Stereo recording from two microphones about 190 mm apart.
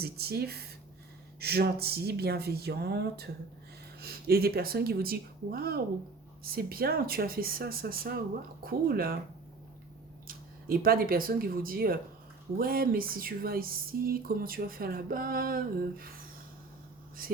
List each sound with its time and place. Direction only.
0.0 s speech: 55° right (ahead or behind)
10.2 s speech: 50° right (ahead or behind)